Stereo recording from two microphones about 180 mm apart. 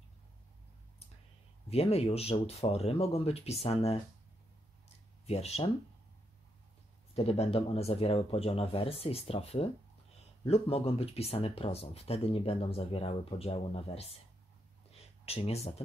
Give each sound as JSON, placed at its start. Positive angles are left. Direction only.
{"t": 1.7, "sound": "speech", "side_deg": 35}
{"t": 4.8, "sound": "a sound", "side_deg": 35}
{"t": 7.2, "sound": "speech", "side_deg": 35}
{"t": 15.2, "sound": "speech", "side_deg": 35}